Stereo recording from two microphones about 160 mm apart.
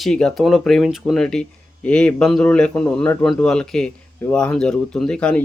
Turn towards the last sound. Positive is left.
turn(degrees=5)  # may be behind; listen again after turning